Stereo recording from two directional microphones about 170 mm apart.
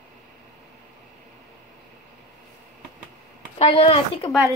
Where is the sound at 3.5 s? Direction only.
35° left (ahead or behind).